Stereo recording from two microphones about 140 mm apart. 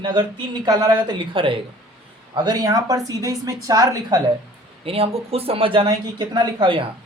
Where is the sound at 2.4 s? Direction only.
25° right (ahead or behind).